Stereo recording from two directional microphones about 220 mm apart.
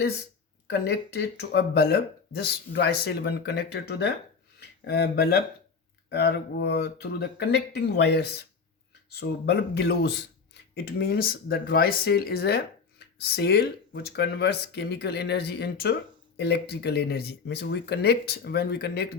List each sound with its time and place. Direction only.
0.7 s speech: 50° left (ahead or behind)